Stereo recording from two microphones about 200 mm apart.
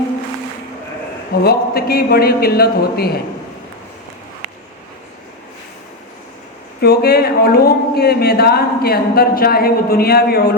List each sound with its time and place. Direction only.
1.5 s a woman's voice: 50° left (ahead or behind)
6.8 s a woman's voice: 55° left (ahead or behind)